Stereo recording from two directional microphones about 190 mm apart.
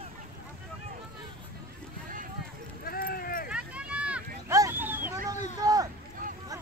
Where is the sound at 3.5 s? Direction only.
5° right (ahead or behind).